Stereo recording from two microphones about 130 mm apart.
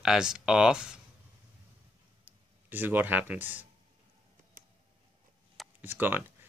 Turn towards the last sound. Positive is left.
turn(degrees=-15)  # may be behind; listen again after turning